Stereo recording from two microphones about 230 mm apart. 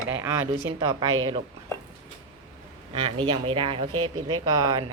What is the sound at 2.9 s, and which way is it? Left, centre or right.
A woman's voice, right.